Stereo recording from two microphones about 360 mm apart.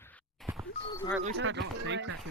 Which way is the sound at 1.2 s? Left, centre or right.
Right.